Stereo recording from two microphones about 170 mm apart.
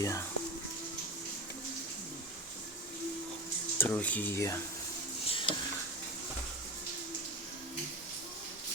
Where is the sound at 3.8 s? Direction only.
10° left (ahead or behind).